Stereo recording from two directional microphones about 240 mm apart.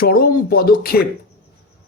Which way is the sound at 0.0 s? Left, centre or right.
Left.